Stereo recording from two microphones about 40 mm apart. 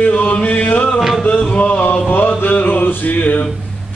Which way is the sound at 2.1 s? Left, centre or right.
Left.